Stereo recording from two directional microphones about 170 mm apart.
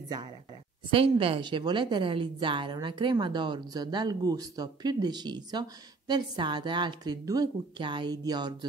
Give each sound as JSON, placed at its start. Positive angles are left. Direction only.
{"t": 0.9, "sound": "a woman's voice", "side_deg": -35}